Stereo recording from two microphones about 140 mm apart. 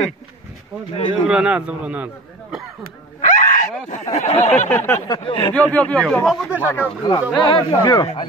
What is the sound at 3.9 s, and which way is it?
Speech, 55° left (ahead or behind).